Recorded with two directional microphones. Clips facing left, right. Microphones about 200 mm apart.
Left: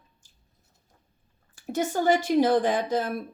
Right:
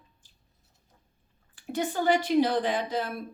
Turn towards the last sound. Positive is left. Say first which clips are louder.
# left 3 dB
turn(degrees=45)  # may be behind; listen again after turning